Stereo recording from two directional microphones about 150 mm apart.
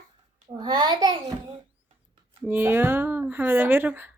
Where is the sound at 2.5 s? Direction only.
15° right (ahead or behind).